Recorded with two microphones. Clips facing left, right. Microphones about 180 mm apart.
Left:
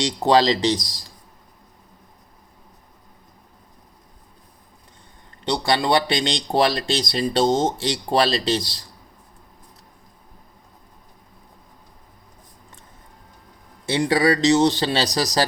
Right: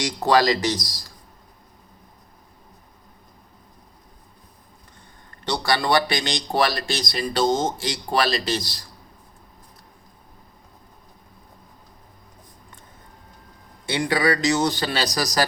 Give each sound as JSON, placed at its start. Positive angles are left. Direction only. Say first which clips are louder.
{"t": 0.2, "sound": "speech", "louder": "left 2 dB", "side_deg": 25}
{"t": 5.5, "sound": "speech", "louder": "left 2 dB", "side_deg": 20}
{"t": 13.8, "sound": "speech", "louder": "left 3 dB", "side_deg": 30}